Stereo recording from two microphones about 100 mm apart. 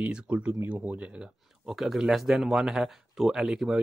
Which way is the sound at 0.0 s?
15° right (ahead or behind).